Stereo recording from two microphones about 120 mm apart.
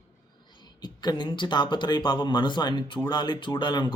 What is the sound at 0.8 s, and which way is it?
Speech, 35° left (ahead or behind).